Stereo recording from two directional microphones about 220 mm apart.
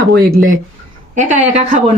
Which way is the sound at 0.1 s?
40° right (ahead or behind).